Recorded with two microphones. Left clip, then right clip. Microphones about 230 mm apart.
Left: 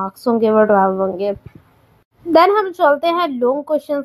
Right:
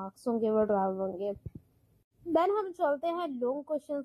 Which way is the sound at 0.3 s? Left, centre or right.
Left.